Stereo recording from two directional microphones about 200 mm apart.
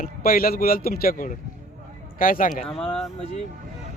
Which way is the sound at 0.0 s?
45° left (ahead or behind).